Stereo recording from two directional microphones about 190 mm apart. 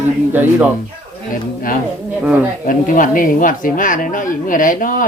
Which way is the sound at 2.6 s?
45° left (ahead or behind).